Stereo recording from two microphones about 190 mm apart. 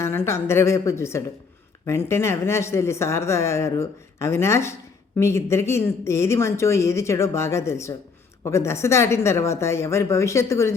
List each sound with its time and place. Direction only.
0.0 s speech: 15° left (ahead or behind)